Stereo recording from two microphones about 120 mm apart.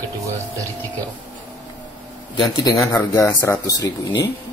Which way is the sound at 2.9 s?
25° left (ahead or behind).